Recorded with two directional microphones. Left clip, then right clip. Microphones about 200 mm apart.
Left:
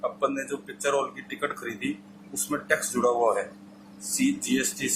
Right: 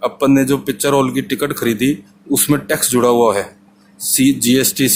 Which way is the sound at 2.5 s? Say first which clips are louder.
Right 5 dB; 55° right (ahead or behind).